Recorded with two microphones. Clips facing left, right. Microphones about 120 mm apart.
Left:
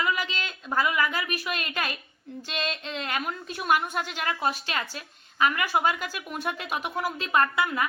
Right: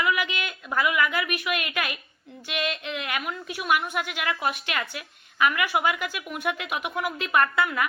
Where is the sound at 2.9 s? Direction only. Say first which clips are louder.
Even; 35° left (ahead or behind).